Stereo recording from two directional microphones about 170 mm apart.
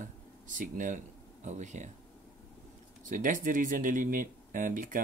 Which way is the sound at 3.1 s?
50° right (ahead or behind).